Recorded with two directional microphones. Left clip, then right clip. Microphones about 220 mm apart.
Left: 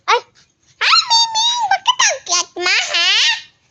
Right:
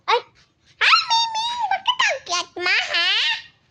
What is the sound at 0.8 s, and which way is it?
Baby laughter, 5° left (ahead or behind).